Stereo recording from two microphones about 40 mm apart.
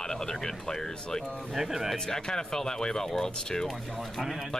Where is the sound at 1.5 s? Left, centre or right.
Centre.